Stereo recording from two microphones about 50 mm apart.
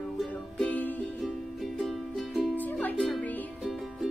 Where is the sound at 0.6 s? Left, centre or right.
Left.